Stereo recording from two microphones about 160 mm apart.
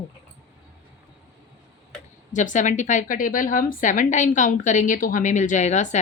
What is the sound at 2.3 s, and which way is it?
A woman's voice, 50° left (ahead or behind).